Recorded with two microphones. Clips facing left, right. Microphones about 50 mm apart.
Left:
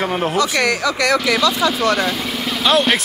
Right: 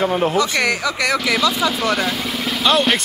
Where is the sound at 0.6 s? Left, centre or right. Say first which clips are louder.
Left 2 dB; right.